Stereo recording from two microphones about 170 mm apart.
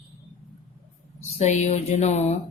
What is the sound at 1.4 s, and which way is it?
Speech, 40° left (ahead or behind).